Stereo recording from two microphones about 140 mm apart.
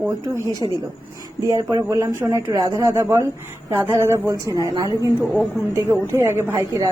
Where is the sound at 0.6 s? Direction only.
30° right (ahead or behind).